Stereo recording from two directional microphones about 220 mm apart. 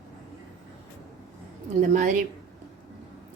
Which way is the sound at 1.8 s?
40° right (ahead or behind).